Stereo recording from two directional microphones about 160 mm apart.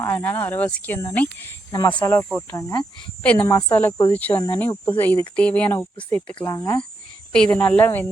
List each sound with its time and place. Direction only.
0.0 s speech: 10° left (ahead or behind)
6.4 s speech: 20° left (ahead or behind)
7.3 s speech: 5° left (ahead or behind)